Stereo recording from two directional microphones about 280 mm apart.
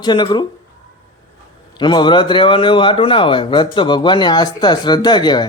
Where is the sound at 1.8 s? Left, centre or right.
Centre.